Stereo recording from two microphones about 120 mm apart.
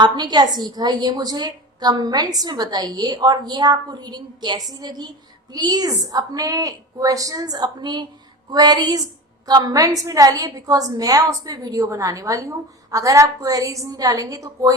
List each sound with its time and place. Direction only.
0.0 s a woman's voice: 35° right (ahead or behind)